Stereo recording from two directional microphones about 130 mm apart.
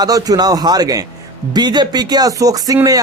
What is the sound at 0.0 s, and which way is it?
Speech, 30° right (ahead or behind).